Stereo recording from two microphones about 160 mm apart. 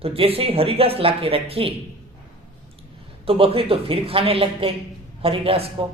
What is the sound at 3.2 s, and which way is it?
A man's voice, 35° right (ahead or behind).